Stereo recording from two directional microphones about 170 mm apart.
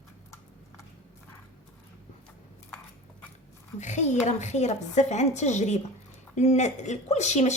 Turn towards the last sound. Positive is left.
turn(degrees=40)  # may be behind; listen again after turning